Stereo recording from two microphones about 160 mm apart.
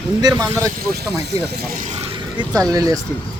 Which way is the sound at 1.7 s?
50° right (ahead or behind).